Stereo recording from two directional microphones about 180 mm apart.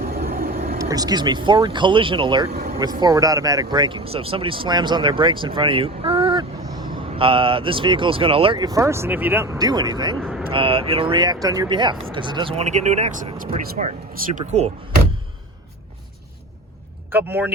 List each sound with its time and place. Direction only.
0.0 s vehicle: 55° right (ahead or behind)
0.8 s speech: 20° right (ahead or behind)
10.2 s speech: 5° left (ahead or behind)
10.5 s speech: 30° right (ahead or behind)
17.1 s speech: 10° right (ahead or behind)